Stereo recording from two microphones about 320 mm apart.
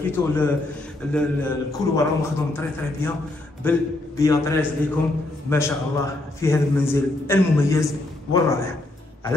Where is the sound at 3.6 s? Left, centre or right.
Centre.